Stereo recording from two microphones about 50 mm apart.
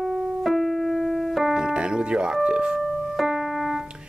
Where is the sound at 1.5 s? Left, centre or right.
Centre.